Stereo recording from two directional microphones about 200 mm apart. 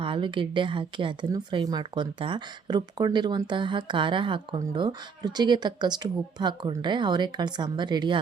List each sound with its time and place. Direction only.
0.0 s a woman's voice: 25° right (ahead or behind)